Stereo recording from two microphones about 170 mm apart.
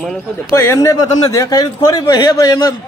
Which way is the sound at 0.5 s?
15° left (ahead or behind).